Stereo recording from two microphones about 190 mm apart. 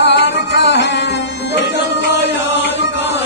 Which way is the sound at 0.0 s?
65° left (ahead or behind).